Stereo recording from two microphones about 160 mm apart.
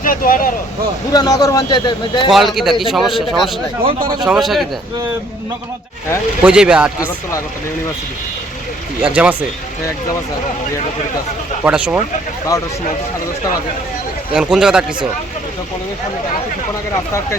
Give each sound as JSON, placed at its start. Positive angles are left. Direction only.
{"t": 0.0, "sound": "speech", "side_deg": 60}
{"t": 1.1, "sound": "a man's voice", "side_deg": 25}
{"t": 2.3, "sound": "a man's voice", "side_deg": 0}
{"t": 6.4, "sound": "speech", "side_deg": -5}
{"t": 9.0, "sound": "speech", "side_deg": -5}
{"t": 11.6, "sound": "speech", "side_deg": -10}
{"t": 14.3, "sound": "a man's voice", "side_deg": -5}